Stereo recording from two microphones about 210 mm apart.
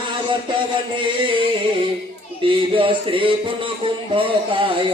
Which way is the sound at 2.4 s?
25° right (ahead or behind).